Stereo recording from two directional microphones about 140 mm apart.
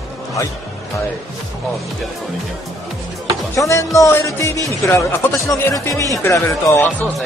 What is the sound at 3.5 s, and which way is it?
Speech, 25° left (ahead or behind).